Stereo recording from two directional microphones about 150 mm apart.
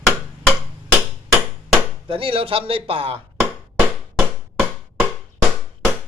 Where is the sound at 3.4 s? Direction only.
10° right (ahead or behind).